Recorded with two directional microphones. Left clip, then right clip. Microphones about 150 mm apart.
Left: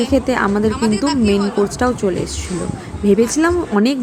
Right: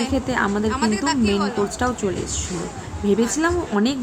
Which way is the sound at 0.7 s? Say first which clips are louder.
Left 3 dB; 60° right (ahead or behind).